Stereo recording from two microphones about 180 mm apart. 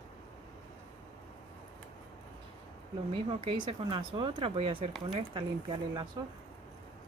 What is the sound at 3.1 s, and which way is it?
Speech, 30° right (ahead or behind).